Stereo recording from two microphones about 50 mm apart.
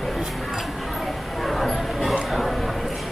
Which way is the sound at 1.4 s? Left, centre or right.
Centre.